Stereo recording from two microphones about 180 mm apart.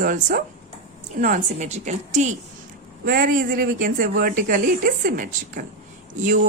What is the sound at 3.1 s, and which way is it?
A woman's voice, 55° right (ahead or behind).